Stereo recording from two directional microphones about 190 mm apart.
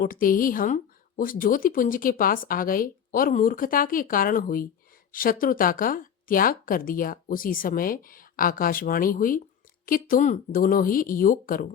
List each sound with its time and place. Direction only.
0.0 s speech: 50° left (ahead or behind)